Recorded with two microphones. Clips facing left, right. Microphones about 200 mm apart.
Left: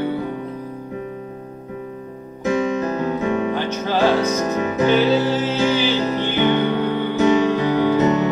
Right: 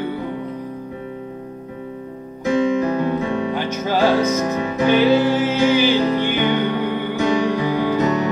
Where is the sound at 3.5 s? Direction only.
10° right (ahead or behind).